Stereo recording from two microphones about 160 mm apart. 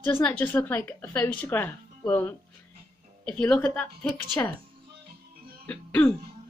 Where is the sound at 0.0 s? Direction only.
10° left (ahead or behind).